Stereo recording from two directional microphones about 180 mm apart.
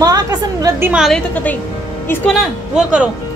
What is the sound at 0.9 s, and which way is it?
Speech, centre (ahead or behind).